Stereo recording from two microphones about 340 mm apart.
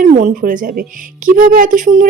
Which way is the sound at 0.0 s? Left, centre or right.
Right.